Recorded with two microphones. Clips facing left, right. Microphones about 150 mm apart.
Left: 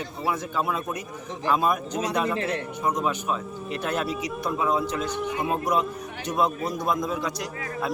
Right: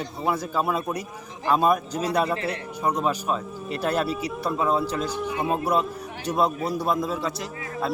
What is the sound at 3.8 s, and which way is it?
Speech, 35° right (ahead or behind).